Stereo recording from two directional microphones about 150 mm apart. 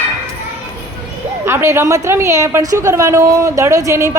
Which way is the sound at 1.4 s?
15° right (ahead or behind).